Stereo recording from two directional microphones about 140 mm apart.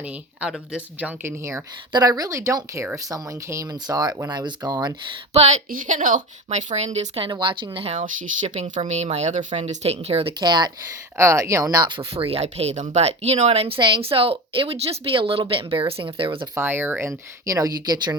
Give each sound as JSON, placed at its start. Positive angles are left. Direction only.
{"t": 0.0, "sound": "speech", "side_deg": -10}
{"t": 1.9, "sound": "speech", "side_deg": -25}
{"t": 5.3, "sound": "a woman's voice", "side_deg": -55}
{"t": 7.3, "sound": "speech", "side_deg": -35}
{"t": 7.9, "sound": "a woman's voice", "side_deg": -65}
{"t": 10.4, "sound": "speech", "side_deg": -30}
{"t": 11.2, "sound": "speech", "side_deg": -20}
{"t": 16.6, "sound": "speech", "side_deg": -15}